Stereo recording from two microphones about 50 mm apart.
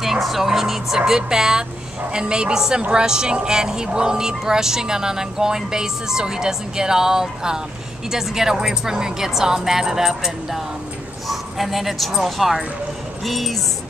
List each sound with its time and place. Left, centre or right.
0.0 s a woman's voice: centre